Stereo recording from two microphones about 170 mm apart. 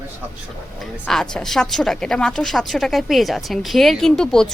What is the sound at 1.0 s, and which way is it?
A woman's voice, 5° left (ahead or behind).